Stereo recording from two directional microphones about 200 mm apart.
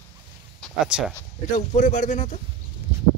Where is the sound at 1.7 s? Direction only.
40° left (ahead or behind).